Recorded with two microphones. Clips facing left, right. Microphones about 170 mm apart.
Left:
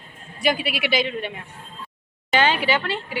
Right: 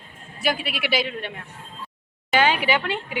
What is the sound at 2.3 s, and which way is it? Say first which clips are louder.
Speech: even; 10° right (ahead or behind).